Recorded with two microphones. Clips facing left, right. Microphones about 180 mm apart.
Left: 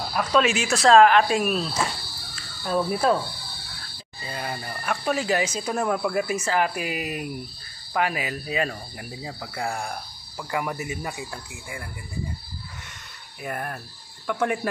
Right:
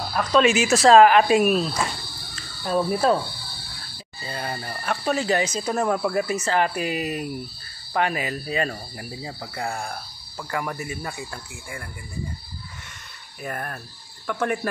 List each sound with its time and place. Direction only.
0.1 s speech: 5° left (ahead or behind)
3.0 s speech: centre (ahead or behind)
4.3 s speech: 5° left (ahead or behind)
10.5 s speech: 15° left (ahead or behind)
13.4 s speech: 15° left (ahead or behind)